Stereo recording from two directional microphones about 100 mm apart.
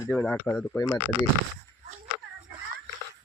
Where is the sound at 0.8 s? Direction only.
30° left (ahead or behind).